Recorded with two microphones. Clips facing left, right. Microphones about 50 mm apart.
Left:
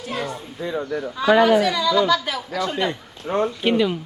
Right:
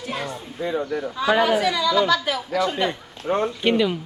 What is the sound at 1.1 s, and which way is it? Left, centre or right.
Speech, centre.